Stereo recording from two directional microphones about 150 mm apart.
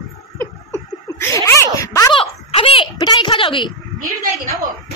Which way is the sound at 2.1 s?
40° left (ahead or behind).